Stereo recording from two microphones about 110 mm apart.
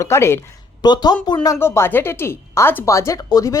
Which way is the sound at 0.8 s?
40° left (ahead or behind).